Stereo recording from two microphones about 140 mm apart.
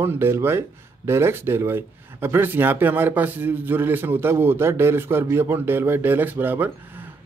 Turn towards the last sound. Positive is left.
turn(degrees=-15)  # may be behind; listen again after turning